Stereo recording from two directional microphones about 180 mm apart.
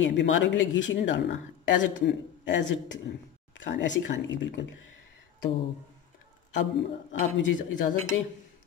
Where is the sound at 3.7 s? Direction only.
90° left.